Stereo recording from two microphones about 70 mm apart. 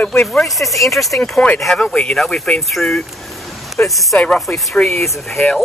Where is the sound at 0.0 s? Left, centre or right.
Left.